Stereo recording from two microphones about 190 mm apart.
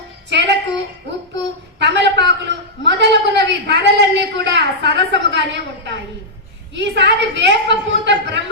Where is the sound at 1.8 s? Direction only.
65° right (ahead or behind).